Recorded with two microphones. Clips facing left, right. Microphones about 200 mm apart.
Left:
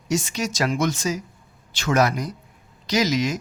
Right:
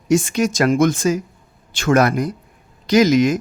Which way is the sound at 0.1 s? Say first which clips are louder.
Right 8 dB; 55° right (ahead or behind).